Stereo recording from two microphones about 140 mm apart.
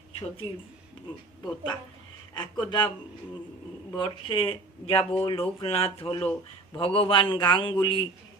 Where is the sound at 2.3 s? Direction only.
30° left (ahead or behind).